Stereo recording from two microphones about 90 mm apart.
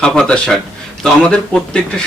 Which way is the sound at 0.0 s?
10° left (ahead or behind).